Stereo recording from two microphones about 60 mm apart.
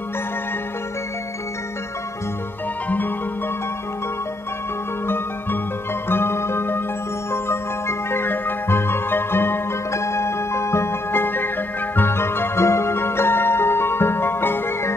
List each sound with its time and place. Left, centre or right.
5.0 s music: left
8.1 s music: left